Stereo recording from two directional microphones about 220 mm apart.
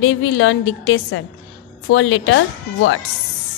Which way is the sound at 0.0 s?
60° left (ahead or behind).